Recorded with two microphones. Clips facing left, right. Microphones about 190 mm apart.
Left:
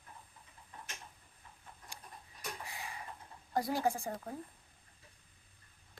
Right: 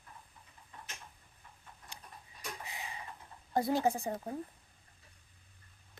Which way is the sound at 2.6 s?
20° right (ahead or behind).